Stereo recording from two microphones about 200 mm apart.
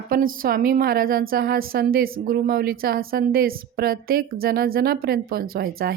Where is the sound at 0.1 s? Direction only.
45° right (ahead or behind).